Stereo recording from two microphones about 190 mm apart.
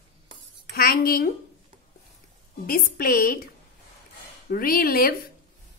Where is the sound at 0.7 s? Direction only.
50° left (ahead or behind).